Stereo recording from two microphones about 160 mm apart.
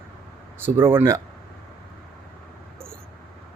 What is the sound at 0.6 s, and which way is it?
Speech, 15° right (ahead or behind).